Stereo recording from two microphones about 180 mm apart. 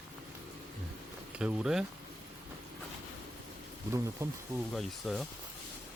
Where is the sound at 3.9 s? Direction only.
15° right (ahead or behind).